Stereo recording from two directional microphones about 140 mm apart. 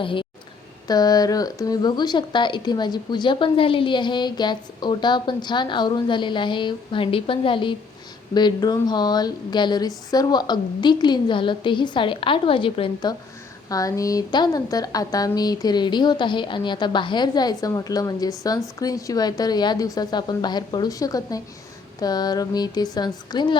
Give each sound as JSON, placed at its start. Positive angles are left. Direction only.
{"t": 0.0, "sound": "speech", "side_deg": 35}
{"t": 13.7, "sound": "a woman's voice", "side_deg": 25}